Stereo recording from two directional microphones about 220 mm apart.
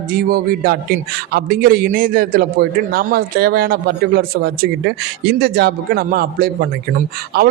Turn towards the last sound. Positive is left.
turn(degrees=-40)  # may be behind; listen again after turning